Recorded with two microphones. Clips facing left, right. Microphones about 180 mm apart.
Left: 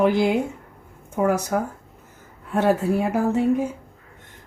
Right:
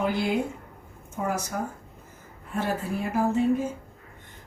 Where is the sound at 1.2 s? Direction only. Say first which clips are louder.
Left 9 dB; 90° left.